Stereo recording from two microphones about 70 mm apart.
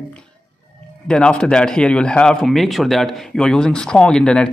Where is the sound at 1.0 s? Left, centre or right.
Centre.